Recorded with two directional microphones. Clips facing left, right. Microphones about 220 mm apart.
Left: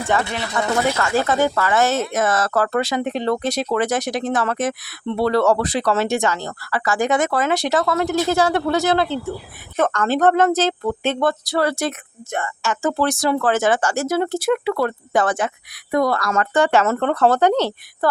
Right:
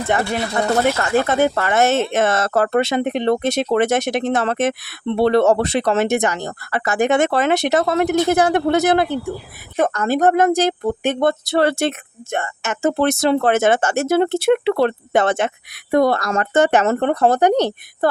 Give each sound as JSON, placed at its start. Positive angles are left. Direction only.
{"t": 0.5, "sound": "speech", "side_deg": -20}